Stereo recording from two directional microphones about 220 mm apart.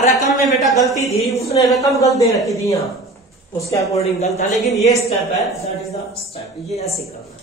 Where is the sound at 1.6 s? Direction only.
Centre (ahead or behind).